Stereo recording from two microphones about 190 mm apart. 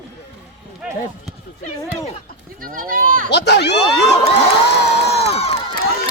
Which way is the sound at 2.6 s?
50° right (ahead or behind).